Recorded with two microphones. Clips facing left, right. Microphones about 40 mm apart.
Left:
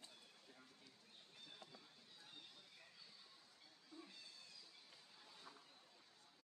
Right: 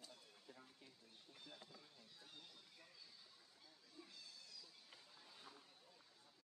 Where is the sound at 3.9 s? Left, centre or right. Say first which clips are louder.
Left 3 dB; left.